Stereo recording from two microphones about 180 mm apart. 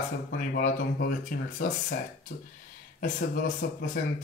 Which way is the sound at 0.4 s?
50° left (ahead or behind).